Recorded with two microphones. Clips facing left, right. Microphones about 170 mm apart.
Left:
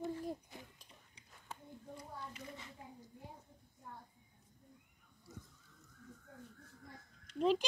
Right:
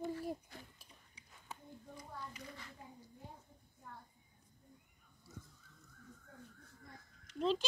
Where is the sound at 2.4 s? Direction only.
20° left (ahead or behind).